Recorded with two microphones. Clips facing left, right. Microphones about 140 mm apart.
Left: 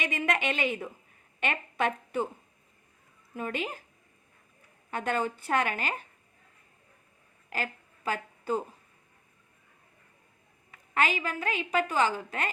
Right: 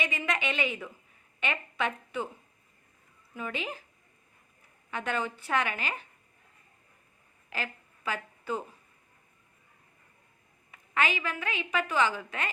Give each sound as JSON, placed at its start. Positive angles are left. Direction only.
{"t": 0.0, "sound": "a woman's voice", "side_deg": 50}
{"t": 3.3, "sound": "a woman's voice", "side_deg": 45}
{"t": 4.9, "sound": "a woman's voice", "side_deg": 45}
{"t": 7.5, "sound": "a woman's voice", "side_deg": 40}
{"t": 10.9, "sound": "a woman's voice", "side_deg": 40}